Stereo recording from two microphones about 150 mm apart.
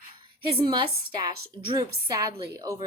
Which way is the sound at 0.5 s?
30° right (ahead or behind).